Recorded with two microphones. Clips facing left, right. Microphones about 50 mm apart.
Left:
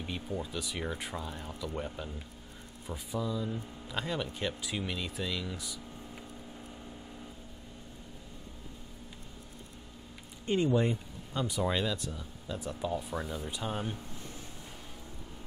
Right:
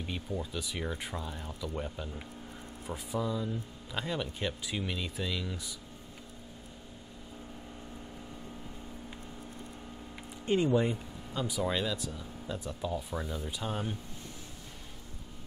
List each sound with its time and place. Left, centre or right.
0.0 s speech: centre
3.2 s speech: centre
10.4 s speech: centre
10.7 s speech: centre